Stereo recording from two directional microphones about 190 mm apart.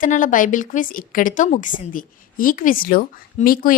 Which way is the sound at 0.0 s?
45° left (ahead or behind).